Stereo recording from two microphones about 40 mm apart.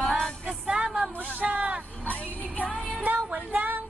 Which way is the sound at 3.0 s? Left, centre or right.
Right.